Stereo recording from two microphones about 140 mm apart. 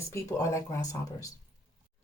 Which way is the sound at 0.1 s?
20° left (ahead or behind).